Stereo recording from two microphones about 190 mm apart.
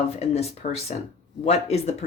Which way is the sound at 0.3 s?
35° left (ahead or behind).